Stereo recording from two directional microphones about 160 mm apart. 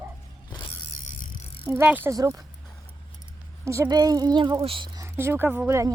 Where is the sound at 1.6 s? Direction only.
15° right (ahead or behind).